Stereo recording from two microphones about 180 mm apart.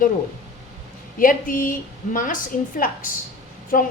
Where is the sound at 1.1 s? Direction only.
50° left (ahead or behind).